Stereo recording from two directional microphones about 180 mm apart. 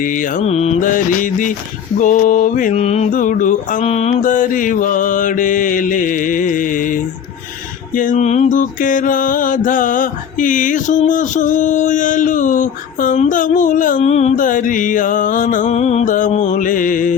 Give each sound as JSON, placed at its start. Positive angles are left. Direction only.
{"t": 0.0, "sound": "mantra", "side_deg": 50}